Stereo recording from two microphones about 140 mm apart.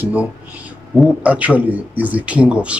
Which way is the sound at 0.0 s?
10° right (ahead or behind).